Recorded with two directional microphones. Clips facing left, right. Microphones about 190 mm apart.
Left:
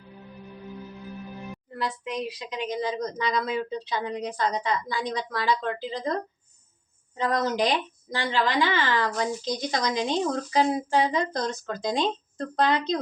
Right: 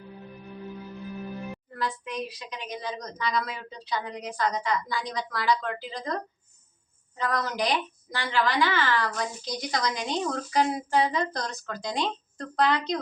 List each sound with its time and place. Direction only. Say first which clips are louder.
1.7 s a woman's voice: left 2 dB; 20° left (ahead or behind)
7.2 s a woman's voice: left 4 dB; 25° left (ahead or behind)